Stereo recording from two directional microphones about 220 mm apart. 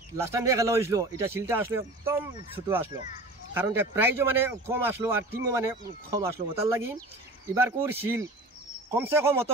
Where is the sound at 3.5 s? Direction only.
10° right (ahead or behind).